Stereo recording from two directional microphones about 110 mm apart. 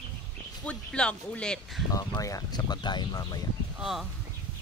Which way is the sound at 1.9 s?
30° left (ahead or behind).